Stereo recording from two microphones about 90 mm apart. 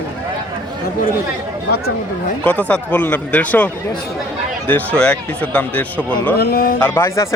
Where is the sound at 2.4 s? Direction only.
15° left (ahead or behind).